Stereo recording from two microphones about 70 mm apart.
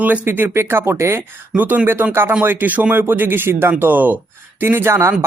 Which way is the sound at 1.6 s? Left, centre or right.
Right.